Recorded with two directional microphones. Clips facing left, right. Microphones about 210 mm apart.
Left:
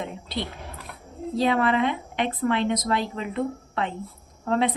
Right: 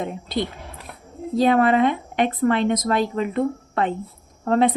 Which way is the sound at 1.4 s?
50° right (ahead or behind).